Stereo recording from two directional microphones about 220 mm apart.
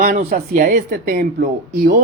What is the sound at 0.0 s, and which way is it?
Speech, 40° right (ahead or behind).